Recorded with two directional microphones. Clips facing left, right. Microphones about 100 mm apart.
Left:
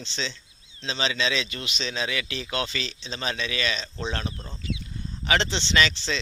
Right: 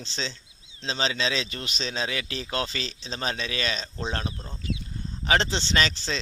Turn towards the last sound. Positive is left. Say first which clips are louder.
# left 2 dB
turn(degrees=-40)  # may be behind; listen again after turning